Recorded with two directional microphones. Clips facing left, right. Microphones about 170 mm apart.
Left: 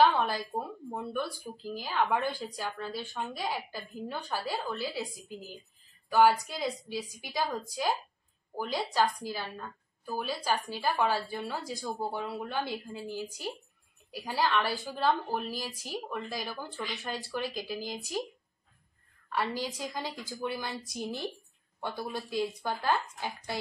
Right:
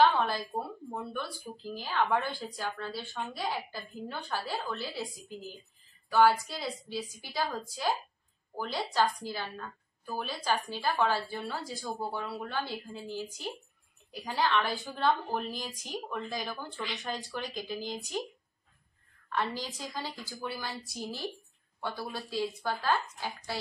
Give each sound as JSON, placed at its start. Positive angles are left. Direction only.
{"t": 0.0, "sound": "a sound", "side_deg": 10}
{"t": 1.7, "sound": "a woman's voice", "side_deg": 10}
{"t": 19.3, "sound": "a woman's voice", "side_deg": 10}